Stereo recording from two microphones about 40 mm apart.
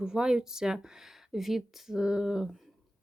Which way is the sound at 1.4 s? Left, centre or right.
Centre.